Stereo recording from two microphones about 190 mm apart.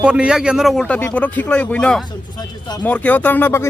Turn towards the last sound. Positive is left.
turn(degrees=10)  # may be behind; listen again after turning